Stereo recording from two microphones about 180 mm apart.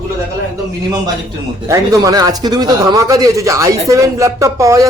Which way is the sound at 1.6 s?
20° right (ahead or behind).